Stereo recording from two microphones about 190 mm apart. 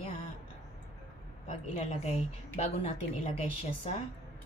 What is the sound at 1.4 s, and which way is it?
Speech, 35° left (ahead or behind).